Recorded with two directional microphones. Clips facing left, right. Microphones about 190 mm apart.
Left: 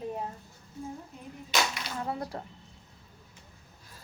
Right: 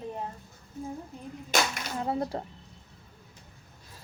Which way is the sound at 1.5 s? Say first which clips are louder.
Right 2 dB; 50° right (ahead or behind).